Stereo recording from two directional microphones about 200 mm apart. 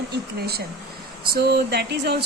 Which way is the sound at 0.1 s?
50° right (ahead or behind).